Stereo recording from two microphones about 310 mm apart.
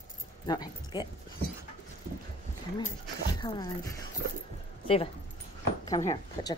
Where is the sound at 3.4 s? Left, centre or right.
Centre.